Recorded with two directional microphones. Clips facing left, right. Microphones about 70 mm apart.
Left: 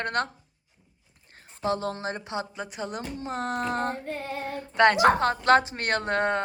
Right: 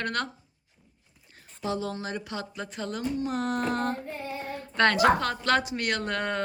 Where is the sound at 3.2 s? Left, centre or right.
Left.